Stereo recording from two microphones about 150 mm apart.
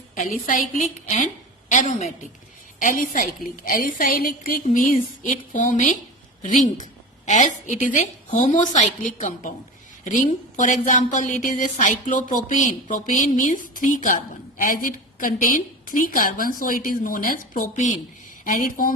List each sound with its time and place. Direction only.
0.4 s a woman's voice: 60° left (ahead or behind)
2.7 s a woman's voice: 65° left (ahead or behind)
18.4 s a woman's voice: 70° left (ahead or behind)